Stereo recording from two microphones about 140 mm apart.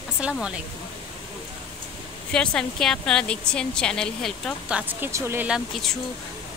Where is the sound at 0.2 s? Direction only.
5° right (ahead or behind).